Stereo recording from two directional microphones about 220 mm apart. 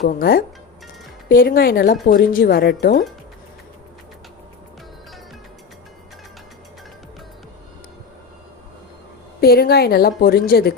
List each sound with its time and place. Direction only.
0.0 s a woman's voice: 40° left (ahead or behind)
9.4 s a woman's voice: 45° left (ahead or behind)